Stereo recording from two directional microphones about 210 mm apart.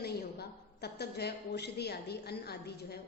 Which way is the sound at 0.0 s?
50° left (ahead or behind).